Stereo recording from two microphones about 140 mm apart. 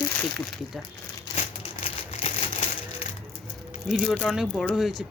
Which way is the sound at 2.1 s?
45° left (ahead or behind).